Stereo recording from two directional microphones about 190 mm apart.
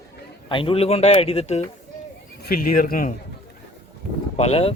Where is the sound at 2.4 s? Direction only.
50° left (ahead or behind).